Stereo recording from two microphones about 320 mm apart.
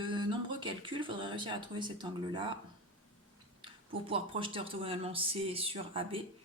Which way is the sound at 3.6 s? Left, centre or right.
Centre.